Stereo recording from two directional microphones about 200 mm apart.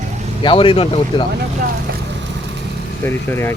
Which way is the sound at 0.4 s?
25° left (ahead or behind).